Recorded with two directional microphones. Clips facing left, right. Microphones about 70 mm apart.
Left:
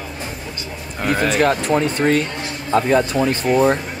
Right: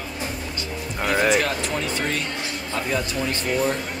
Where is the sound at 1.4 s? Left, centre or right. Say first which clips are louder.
Left 8 dB; left.